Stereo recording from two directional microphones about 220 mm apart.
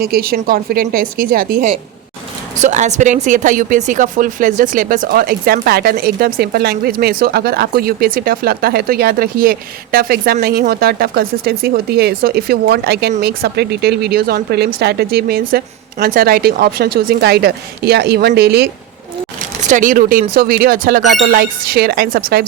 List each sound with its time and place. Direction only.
0.0 s speech: 45° right (ahead or behind)
19.6 s speech: 35° right (ahead or behind)